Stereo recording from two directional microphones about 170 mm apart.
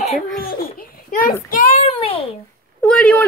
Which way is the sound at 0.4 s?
60° left (ahead or behind).